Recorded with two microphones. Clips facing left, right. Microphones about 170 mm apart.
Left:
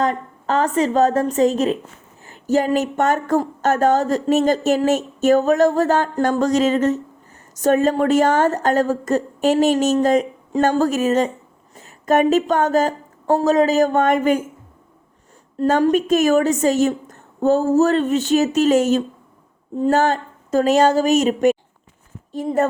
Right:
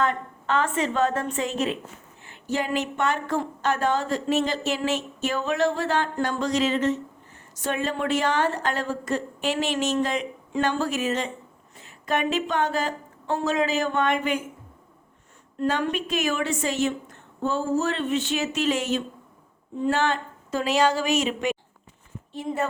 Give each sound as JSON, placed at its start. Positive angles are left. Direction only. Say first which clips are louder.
{"t": 0.0, "sound": "a woman's voice", "louder": "left 5 dB", "side_deg": 40}
{"t": 15.5, "sound": "a woman's voice", "louder": "left 9 dB", "side_deg": 40}